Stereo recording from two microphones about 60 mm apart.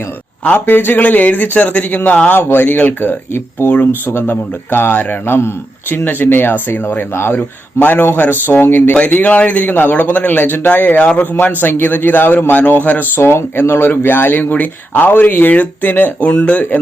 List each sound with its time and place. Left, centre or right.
0.4 s a man's voice: left
5.2 s a man's voice: left
7.3 s a man's voice: left